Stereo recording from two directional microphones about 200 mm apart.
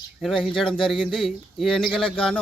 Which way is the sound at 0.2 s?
Centre (ahead or behind).